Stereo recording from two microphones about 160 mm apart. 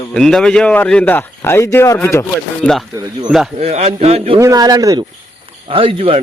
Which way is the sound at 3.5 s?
45° right (ahead or behind).